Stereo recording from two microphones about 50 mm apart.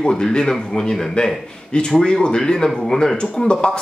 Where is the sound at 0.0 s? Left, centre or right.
Centre.